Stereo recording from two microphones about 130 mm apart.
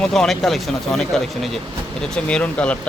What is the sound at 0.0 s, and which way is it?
Speech, 5° left (ahead or behind).